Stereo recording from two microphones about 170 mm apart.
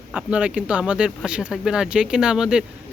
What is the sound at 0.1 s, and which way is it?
Speech, 5° right (ahead or behind).